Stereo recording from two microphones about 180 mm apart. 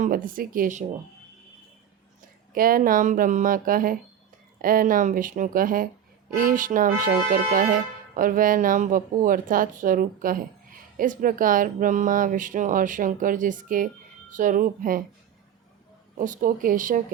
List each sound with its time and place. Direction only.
0.0 s speech: 50° right (ahead or behind)
2.5 s speech: 50° right (ahead or behind)
16.1 s speech: 45° right (ahead or behind)